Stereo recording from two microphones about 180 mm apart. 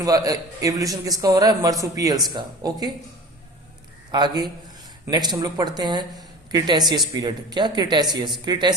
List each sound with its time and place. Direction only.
0.0 s speech: 20° right (ahead or behind)
4.1 s speech: 25° right (ahead or behind)